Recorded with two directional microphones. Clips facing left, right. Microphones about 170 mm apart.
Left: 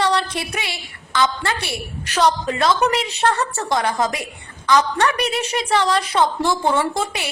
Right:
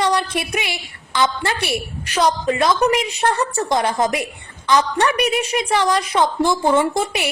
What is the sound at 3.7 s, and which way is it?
Speech, 20° right (ahead or behind).